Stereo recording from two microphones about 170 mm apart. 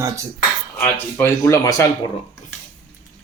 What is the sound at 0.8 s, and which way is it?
Speech, 10° left (ahead or behind).